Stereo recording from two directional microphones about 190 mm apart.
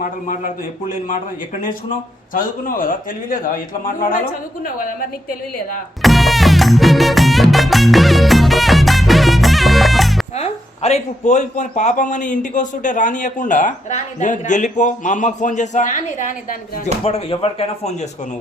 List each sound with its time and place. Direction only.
0.0 s a man's voice: 45° left (ahead or behind)
2.3 s a man's voice: 45° left (ahead or behind)
6.0 s music: centre (ahead or behind)
10.3 s speech: 35° left (ahead or behind)
17.0 s speech: 30° left (ahead or behind)